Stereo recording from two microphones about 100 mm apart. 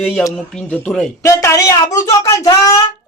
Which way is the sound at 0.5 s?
10° left (ahead or behind).